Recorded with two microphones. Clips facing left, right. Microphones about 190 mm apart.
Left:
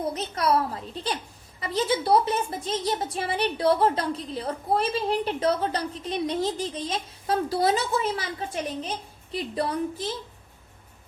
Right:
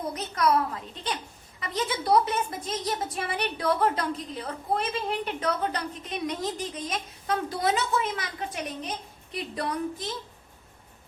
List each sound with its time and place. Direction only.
0.1 s a woman's voice: 30° left (ahead or behind)